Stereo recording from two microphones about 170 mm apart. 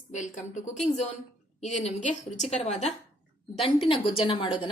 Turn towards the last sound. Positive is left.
turn(degrees=30)  # may be behind; listen again after turning